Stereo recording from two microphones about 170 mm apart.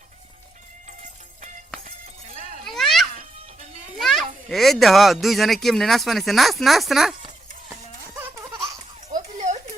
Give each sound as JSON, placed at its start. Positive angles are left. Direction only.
{"t": 2.6, "sound": "a sound", "side_deg": 0}
{"t": 4.0, "sound": "a child's voice", "side_deg": 0}
{"t": 8.4, "sound": "laughter", "side_deg": -20}